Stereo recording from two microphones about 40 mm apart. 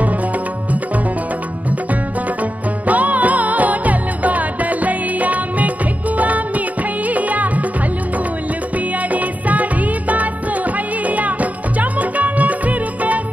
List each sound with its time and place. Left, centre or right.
2.9 s music: right
9.1 s music: right